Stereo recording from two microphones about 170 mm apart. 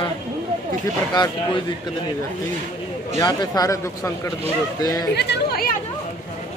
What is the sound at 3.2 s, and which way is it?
Speech, 20° left (ahead or behind).